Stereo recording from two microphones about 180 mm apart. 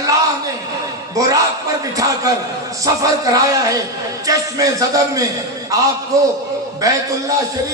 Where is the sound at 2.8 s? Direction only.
20° right (ahead or behind).